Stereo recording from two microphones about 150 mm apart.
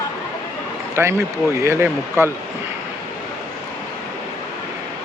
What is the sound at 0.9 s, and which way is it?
Speech, 15° right (ahead or behind).